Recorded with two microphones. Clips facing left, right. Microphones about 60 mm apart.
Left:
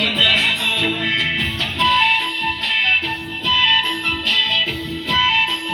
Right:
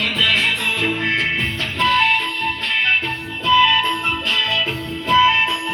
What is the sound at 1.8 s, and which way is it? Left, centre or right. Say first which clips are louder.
Music: even; right.